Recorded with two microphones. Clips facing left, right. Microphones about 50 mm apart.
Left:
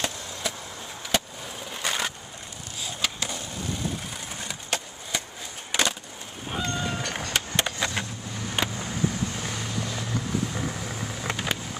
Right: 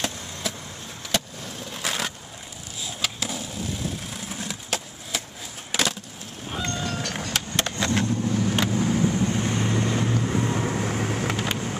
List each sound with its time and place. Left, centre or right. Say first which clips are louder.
0.0 s vehicle: right 1 dB; centre
2.8 s skateboard: even; centre
6.5 s vehicle: even; centre
8.9 s vehicle: right 6 dB; centre
9.8 s boat: right 7 dB; right
10.2 s vehicle: right 4 dB; right
11.2 s vehicle: right 2 dB; centre